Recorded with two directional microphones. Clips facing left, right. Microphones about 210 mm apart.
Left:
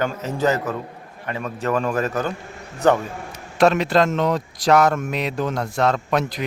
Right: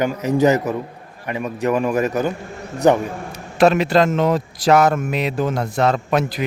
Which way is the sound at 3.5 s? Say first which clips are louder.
Right 2 dB; 5° right (ahead or behind).